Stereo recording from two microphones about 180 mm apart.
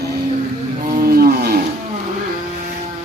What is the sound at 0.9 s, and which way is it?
Wild animals, 55° right (ahead or behind).